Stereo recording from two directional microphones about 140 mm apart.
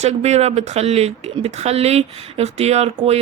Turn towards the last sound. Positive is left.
turn(degrees=-50)  # may be behind; listen again after turning